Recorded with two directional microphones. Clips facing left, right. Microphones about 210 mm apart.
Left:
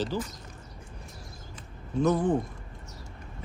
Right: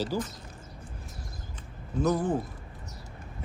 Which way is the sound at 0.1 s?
10° right (ahead or behind).